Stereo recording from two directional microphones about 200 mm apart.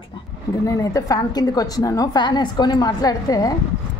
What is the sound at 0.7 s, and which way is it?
Speech, 15° left (ahead or behind).